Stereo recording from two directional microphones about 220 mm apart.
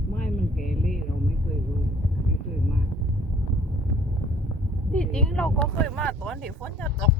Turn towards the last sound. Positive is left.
turn(degrees=5)  # may be behind; listen again after turning